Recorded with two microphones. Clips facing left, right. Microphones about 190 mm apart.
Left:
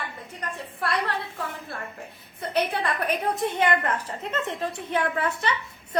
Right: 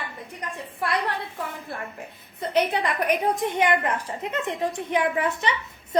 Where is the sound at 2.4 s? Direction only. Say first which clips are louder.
Right 3 dB; 15° right (ahead or behind).